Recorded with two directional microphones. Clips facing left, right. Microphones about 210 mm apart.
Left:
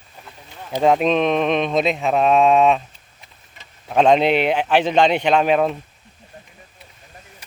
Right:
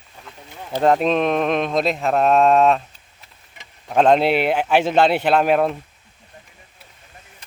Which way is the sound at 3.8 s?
Centre (ahead or behind).